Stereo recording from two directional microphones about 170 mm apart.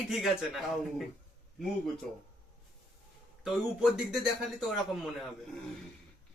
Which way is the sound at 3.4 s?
Centre (ahead or behind).